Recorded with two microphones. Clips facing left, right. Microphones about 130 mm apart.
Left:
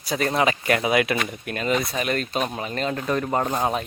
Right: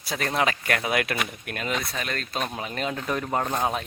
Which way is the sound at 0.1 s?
Centre (ahead or behind).